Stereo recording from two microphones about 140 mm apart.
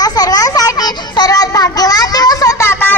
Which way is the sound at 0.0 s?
25° left (ahead or behind).